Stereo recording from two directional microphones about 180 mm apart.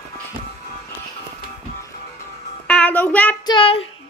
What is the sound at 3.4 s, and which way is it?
Child singing, 30° left (ahead or behind).